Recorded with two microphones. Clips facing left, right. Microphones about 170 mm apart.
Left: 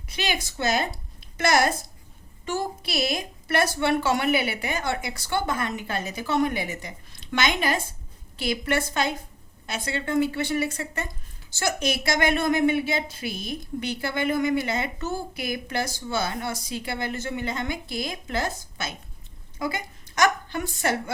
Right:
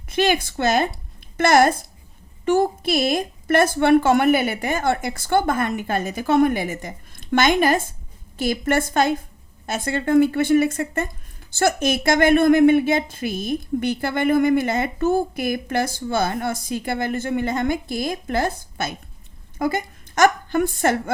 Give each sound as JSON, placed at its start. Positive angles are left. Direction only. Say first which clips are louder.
{"t": 0.1, "sound": "a woman's voice", "louder": "right 10 dB", "side_deg": -55}